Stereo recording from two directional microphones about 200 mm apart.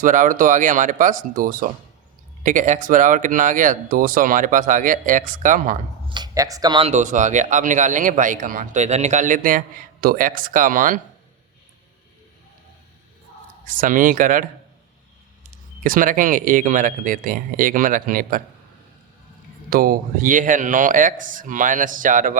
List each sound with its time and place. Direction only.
0.0 s speech: 40° right (ahead or behind)
6.1 s speech: 20° right (ahead or behind); by 11.0 s 40° right (ahead or behind)
13.7 s speech: 40° right (ahead or behind)
15.8 s speech: 40° right (ahead or behind)
19.7 s speech: 45° right (ahead or behind)